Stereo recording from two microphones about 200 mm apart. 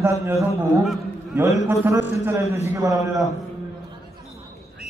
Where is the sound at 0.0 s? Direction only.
15° right (ahead or behind).